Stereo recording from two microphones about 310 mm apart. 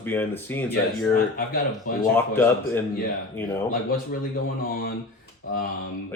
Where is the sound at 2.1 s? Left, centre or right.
Centre.